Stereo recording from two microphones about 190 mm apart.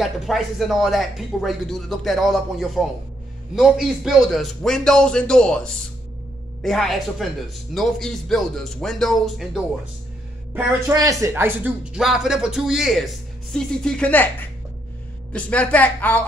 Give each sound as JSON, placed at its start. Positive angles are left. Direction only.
{"t": 0.0, "sound": "speech", "side_deg": 0}
{"t": 10.5, "sound": "speech", "side_deg": -10}
{"t": 15.3, "sound": "a woman's voice", "side_deg": 5}